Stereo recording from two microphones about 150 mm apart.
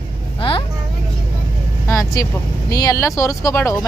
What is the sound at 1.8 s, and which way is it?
Speech, 20° left (ahead or behind).